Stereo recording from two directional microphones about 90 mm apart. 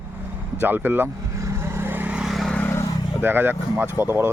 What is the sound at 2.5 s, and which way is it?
Vehicle, 15° left (ahead or behind).